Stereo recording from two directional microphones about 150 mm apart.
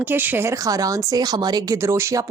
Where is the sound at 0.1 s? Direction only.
15° right (ahead or behind).